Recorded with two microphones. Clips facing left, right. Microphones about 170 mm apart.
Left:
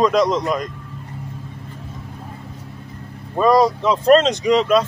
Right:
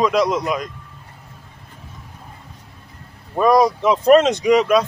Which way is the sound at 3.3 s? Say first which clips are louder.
Even; 5° right (ahead or behind).